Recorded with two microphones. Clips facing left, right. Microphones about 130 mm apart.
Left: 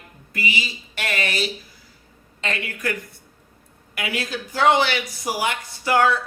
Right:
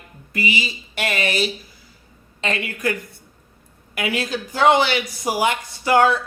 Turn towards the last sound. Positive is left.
turn(degrees=-25)  # may be behind; listen again after turning